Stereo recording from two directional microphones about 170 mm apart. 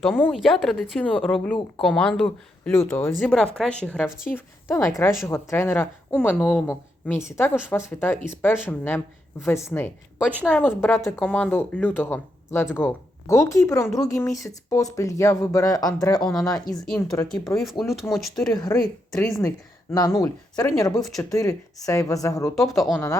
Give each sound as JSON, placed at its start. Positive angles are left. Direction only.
{"t": 0.0, "sound": "speech", "side_deg": 5}
{"t": 10.2, "sound": "speech", "side_deg": -5}
{"t": 10.5, "sound": "speech", "side_deg": 10}
{"t": 16.8, "sound": "speech", "side_deg": 0}
{"t": 18.5, "sound": "speech", "side_deg": 20}
{"t": 19.1, "sound": "speech", "side_deg": 5}
{"t": 19.4, "sound": "speech", "side_deg": 20}
{"t": 22.5, "sound": "speech", "side_deg": 0}